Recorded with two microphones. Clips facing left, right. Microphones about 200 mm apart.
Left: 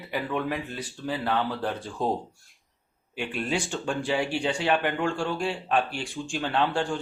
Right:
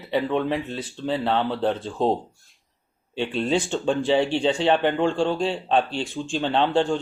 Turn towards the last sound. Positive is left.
turn(degrees=-25)  # may be behind; listen again after turning